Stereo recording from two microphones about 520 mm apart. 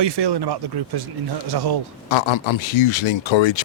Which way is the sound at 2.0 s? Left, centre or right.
Left.